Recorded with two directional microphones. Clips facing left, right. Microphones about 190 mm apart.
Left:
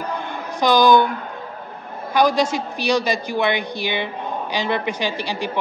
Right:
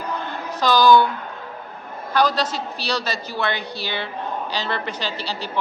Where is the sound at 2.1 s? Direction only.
10° left (ahead or behind).